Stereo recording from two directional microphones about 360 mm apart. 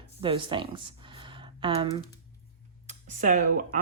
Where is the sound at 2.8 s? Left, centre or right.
Right.